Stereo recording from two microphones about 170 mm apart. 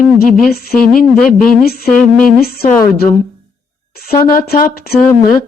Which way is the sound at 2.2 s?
65° left (ahead or behind).